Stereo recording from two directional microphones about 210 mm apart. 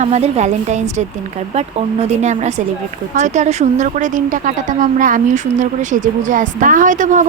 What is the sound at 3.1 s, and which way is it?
A woman's voice, 35° right (ahead or behind).